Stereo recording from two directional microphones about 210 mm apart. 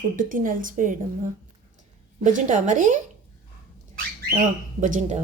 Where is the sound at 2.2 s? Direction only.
35° right (ahead or behind).